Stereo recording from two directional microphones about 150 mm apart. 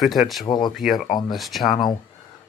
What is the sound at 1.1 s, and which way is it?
Speech, 30° left (ahead or behind).